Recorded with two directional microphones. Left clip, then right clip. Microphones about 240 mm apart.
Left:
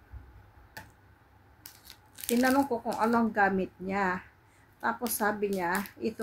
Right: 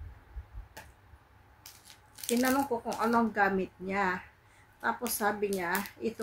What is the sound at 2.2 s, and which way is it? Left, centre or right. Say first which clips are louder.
Speech: left 2 dB; centre.